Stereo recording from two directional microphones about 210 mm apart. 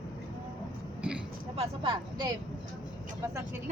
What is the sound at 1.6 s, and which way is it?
Speech, 25° right (ahead or behind).